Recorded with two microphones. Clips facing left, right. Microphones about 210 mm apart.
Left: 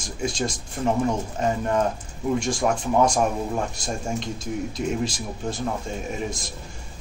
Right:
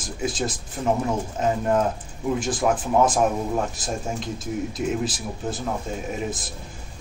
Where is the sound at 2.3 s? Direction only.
5° right (ahead or behind).